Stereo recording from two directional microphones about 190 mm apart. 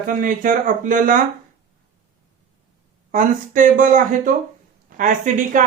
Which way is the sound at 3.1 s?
45° right (ahead or behind).